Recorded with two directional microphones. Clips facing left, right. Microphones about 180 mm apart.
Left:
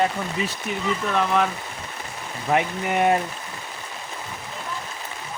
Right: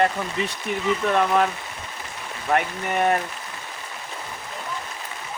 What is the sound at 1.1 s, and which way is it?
Speech, 5° right (ahead or behind).